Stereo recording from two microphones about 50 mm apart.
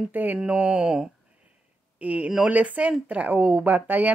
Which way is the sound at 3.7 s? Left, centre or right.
Right.